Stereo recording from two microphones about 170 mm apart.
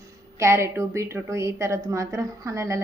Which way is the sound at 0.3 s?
15° right (ahead or behind).